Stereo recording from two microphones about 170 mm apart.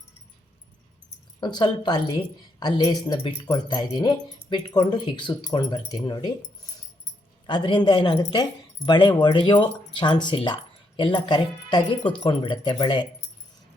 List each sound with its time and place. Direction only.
1.4 s speech: 25° left (ahead or behind)
7.4 s speech: 30° left (ahead or behind)